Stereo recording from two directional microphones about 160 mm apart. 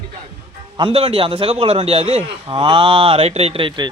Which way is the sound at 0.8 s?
35° right (ahead or behind).